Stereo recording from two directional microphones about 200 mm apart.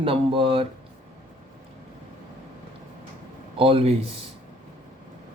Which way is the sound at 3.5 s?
25° right (ahead or behind).